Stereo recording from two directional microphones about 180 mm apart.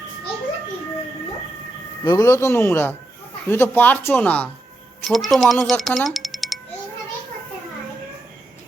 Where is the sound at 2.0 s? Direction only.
15° left (ahead or behind); by 6.6 s centre (ahead or behind).